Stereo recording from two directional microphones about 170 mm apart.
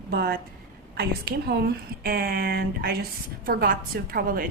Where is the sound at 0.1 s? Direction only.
70° right (ahead or behind).